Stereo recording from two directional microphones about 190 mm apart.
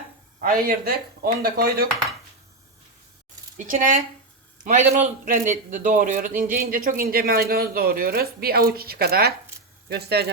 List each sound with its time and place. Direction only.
0.4 s a man's voice: 50° right (ahead or behind)
3.6 s a man's voice: 45° right (ahead or behind)